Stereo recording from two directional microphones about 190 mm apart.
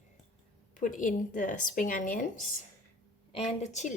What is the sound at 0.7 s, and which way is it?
Speech, 45° left (ahead or behind).